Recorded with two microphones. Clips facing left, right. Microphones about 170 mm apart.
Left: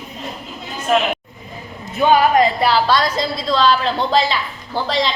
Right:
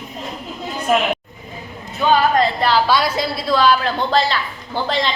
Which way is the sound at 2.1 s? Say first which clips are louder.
Left 2 dB; 15° left (ahead or behind).